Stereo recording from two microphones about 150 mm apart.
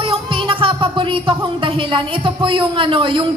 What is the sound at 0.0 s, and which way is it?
Music, 35° right (ahead or behind).